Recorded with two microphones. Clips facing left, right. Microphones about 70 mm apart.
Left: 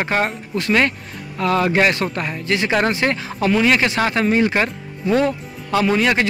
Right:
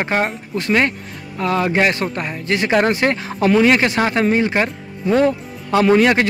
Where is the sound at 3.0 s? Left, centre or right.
Right.